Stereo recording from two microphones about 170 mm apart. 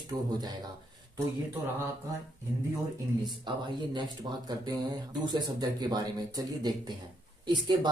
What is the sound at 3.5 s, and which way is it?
Speech, 25° right (ahead or behind).